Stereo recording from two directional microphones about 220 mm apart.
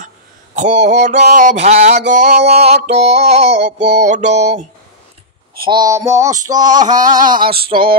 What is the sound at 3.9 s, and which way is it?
Mantra, 30° right (ahead or behind).